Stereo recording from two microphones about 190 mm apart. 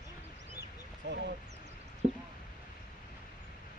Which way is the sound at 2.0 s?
35° right (ahead or behind).